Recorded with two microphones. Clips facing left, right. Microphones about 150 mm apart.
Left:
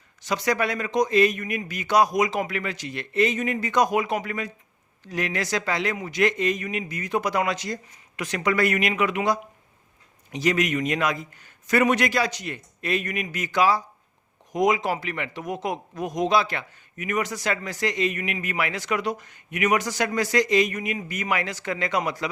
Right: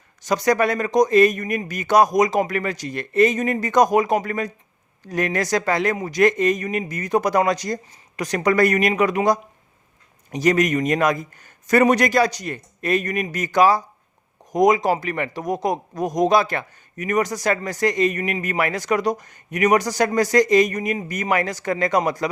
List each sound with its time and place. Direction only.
0.2 s a man's voice: 45° right (ahead or behind)